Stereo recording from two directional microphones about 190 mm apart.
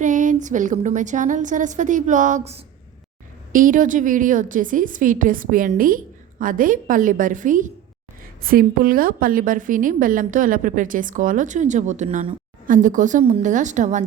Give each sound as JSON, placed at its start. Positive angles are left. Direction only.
{"t": 0.0, "sound": "a woman's voice", "side_deg": -40}